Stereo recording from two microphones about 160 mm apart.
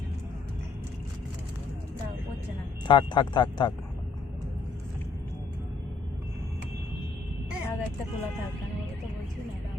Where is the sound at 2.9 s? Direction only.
30° left (ahead or behind).